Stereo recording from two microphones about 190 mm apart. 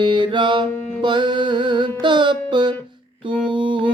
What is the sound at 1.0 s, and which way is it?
Music, 25° right (ahead or behind).